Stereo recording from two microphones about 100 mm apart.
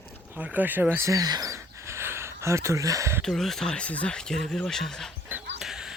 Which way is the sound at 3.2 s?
5° left (ahead or behind).